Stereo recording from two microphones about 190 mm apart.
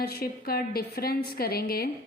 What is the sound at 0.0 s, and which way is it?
A woman's voice, 55° left (ahead or behind).